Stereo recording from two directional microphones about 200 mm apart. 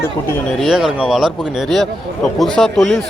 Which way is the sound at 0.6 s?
Centre (ahead or behind).